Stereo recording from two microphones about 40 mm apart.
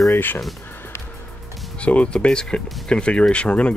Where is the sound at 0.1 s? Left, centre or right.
Left.